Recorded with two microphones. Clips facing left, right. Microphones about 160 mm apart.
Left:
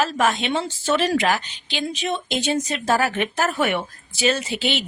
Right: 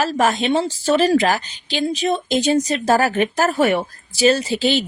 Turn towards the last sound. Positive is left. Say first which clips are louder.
# right 6 dB
turn(degrees=-35)  # may be behind; listen again after turning